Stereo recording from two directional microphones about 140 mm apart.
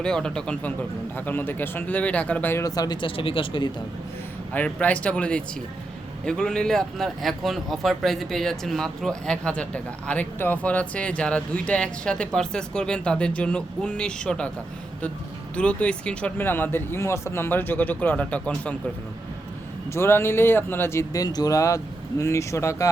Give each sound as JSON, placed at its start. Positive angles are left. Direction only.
{"t": 0.0, "sound": "speech", "side_deg": 5}
{"t": 4.5, "sound": "speech", "side_deg": 10}
{"t": 15.5, "sound": "speech", "side_deg": 10}
{"t": 19.9, "sound": "speech", "side_deg": 15}